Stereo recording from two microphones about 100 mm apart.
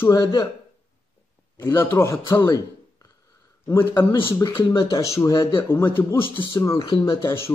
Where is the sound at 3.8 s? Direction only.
40° left (ahead or behind).